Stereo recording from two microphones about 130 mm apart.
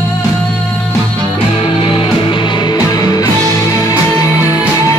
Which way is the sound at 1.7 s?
45° left (ahead or behind).